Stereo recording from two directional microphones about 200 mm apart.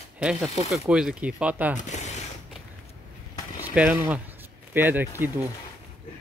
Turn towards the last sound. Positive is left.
turn(degrees=-10)  # may be behind; listen again after turning